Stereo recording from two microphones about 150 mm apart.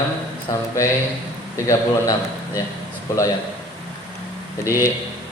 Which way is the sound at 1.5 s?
20° left (ahead or behind).